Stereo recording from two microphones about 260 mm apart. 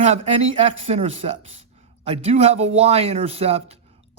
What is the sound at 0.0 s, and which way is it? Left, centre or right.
Speech, right.